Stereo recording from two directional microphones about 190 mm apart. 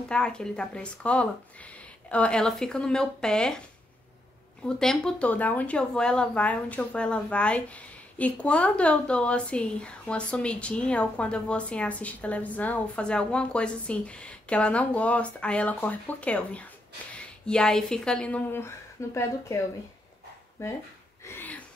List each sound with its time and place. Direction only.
0.1 s speech: 5° left (ahead or behind)
4.6 s speech: 5° left (ahead or behind)
21.2 s a sound: 10° left (ahead or behind)